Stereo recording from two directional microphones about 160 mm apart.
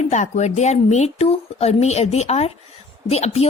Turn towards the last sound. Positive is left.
turn(degrees=40)  # may be behind; listen again after turning